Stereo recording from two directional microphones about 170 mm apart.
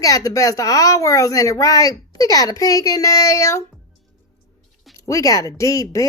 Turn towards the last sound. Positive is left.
turn(degrees=20)  # may be behind; listen again after turning